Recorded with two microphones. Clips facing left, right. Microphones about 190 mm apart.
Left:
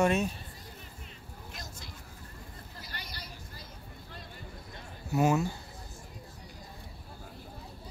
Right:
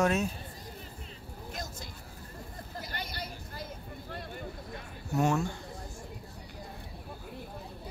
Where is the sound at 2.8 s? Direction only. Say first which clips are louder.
Right 7 dB; 50° right (ahead or behind).